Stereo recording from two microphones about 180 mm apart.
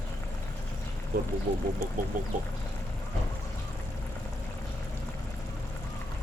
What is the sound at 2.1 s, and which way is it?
Speech, 50° right (ahead or behind).